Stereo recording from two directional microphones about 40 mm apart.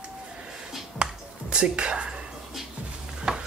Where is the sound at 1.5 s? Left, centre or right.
Right.